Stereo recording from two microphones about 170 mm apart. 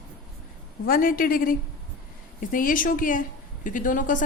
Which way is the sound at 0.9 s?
55° left (ahead or behind).